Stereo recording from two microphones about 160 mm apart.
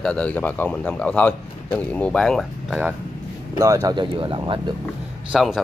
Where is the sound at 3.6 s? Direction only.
20° right (ahead or behind).